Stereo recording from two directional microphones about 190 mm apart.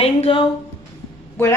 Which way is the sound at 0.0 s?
30° left (ahead or behind).